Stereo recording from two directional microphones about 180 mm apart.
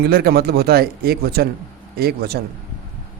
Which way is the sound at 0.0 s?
60° right (ahead or behind).